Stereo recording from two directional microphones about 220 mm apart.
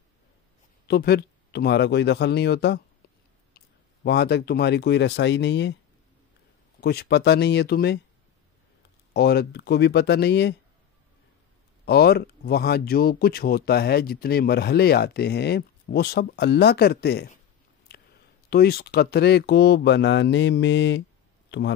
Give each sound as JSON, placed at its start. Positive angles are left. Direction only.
{"t": 0.8, "sound": "speech", "side_deg": 45}
{"t": 6.8, "sound": "speech", "side_deg": 45}
{"t": 9.1, "sound": "speech", "side_deg": 45}
{"t": 11.8, "sound": "speech", "side_deg": 45}
{"t": 18.5, "sound": "speech", "side_deg": 45}